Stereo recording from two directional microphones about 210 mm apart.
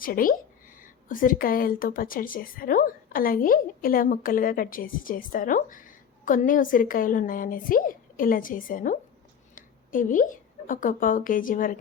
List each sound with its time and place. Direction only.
0.0 s speech: 40° left (ahead or behind)
9.6 s a sound: 40° left (ahead or behind)
10.7 s speech: 40° left (ahead or behind)